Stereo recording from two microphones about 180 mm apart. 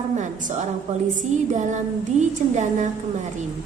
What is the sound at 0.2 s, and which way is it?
A woman's voice, 45° right (ahead or behind).